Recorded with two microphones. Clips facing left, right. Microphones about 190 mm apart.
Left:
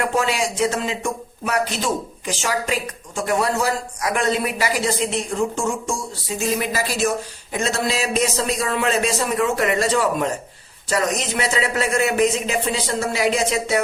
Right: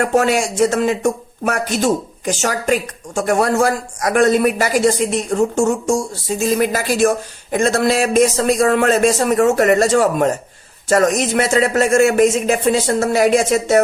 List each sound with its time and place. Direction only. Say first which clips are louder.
0.0 s speech: right 6 dB; 45° right (ahead or behind)